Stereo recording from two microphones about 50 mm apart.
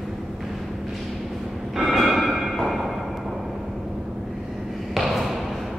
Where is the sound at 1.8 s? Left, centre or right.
Centre.